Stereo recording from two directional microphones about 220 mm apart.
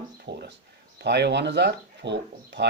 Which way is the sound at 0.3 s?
50° right (ahead or behind).